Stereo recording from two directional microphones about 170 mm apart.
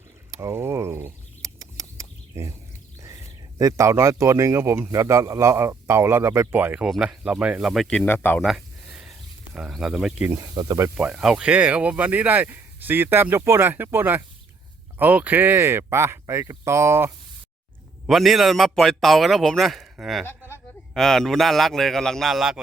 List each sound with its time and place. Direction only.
0.3 s a sound: 20° right (ahead or behind)
3.6 s speech: 20° right (ahead or behind); by 8.4 s 10° left (ahead or behind)
9.6 s a man's voice: 5° right (ahead or behind)
10.3 s speech: 25° right (ahead or behind)
10.9 s speech: 5° right (ahead or behind)
18.0 s a man's voice: centre (ahead or behind)